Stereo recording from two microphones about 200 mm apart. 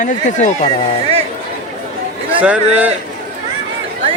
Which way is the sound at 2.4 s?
5° right (ahead or behind).